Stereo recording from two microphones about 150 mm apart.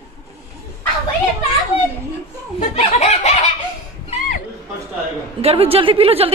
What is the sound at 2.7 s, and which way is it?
Snicker, 45° left (ahead or behind).